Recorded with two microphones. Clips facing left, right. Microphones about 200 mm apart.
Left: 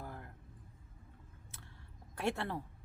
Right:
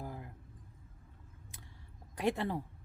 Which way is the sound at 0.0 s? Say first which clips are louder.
Right 3 dB; 10° right (ahead or behind).